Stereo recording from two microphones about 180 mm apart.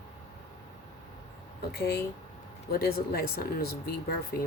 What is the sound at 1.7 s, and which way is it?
Speech, 60° left (ahead or behind).